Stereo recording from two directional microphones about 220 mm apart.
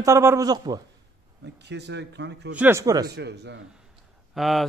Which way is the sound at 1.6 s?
50° right (ahead or behind).